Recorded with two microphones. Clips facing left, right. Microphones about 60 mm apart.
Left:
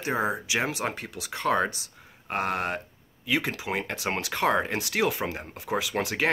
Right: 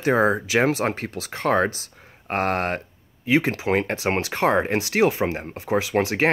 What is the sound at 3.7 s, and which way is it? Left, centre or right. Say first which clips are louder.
Speech: right 8 dB; right.